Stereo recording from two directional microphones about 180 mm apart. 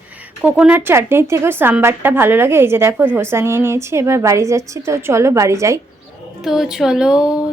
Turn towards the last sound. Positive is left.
turn(degrees=-5)  # may be behind; listen again after turning